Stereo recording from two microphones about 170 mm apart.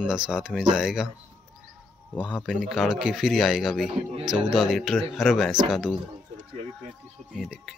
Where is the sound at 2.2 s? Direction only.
5° right (ahead or behind).